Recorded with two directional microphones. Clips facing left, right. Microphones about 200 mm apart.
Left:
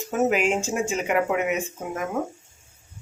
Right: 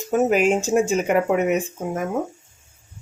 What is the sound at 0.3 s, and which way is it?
Speech, 40° right (ahead or behind).